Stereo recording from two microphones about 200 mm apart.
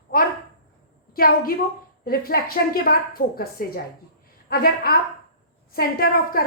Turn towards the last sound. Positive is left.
turn(degrees=50)  # may be behind; listen again after turning